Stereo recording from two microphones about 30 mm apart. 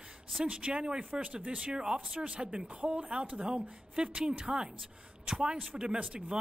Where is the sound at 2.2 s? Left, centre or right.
Right.